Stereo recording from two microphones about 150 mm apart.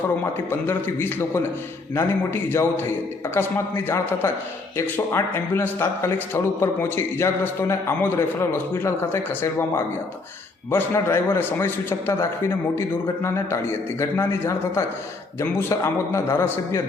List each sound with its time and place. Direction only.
0.7 s a man's voice: 15° left (ahead or behind)